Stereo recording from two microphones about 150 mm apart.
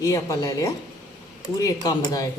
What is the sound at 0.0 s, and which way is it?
A woman's voice, 20° left (ahead or behind).